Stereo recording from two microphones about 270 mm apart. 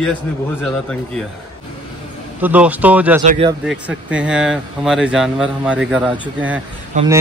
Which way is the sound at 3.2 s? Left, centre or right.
Right.